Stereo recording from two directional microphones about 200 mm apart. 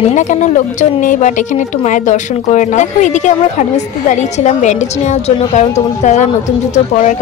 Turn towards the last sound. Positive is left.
turn(degrees=35)  # may be behind; listen again after turning